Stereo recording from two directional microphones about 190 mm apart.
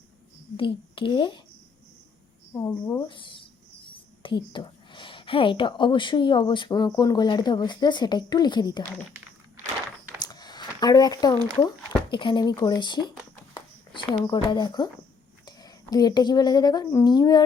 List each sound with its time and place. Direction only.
0.5 s speech: 25° left (ahead or behind)
2.5 s a woman's voice: 15° left (ahead or behind)
10.2 s a sound: 20° left (ahead or behind)
11.6 s speech: 25° left (ahead or behind)
13.5 s a sound: 25° left (ahead or behind)
14.3 s speech: 25° left (ahead or behind)